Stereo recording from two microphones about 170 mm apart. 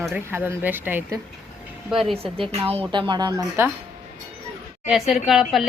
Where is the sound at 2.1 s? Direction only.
35° right (ahead or behind); by 3.7 s 15° right (ahead or behind).